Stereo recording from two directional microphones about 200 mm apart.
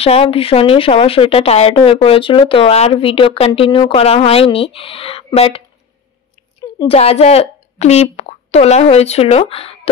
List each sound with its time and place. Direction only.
0.0 s a woman's voice: 30° left (ahead or behind)
6.6 s speech: 25° left (ahead or behind)